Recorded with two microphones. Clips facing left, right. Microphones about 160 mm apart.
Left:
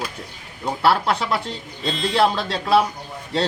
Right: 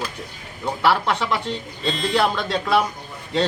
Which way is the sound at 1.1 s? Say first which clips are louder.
Even; 35° left (ahead or behind).